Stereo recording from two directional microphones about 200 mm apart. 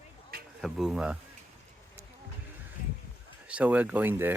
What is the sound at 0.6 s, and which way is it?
Speech, centre (ahead or behind).